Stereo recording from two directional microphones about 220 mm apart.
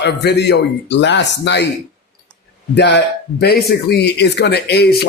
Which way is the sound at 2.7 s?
50° left (ahead or behind).